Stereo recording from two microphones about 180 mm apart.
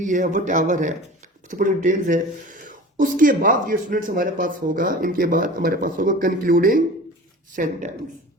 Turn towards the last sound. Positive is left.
turn(degrees=-45)  # may be behind; listen again after turning